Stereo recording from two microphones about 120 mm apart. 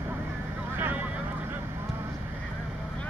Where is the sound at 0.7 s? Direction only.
15° right (ahead or behind).